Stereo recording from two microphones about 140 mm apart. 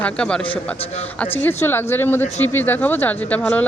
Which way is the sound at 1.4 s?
15° left (ahead or behind).